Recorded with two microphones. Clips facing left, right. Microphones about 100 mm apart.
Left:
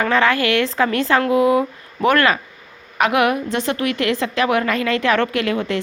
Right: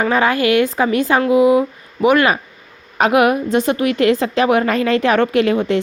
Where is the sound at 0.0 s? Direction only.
15° right (ahead or behind).